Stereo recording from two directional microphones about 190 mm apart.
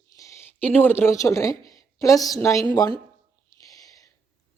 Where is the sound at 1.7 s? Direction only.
20° left (ahead or behind).